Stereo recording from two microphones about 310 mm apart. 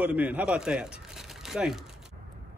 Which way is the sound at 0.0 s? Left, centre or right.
Centre.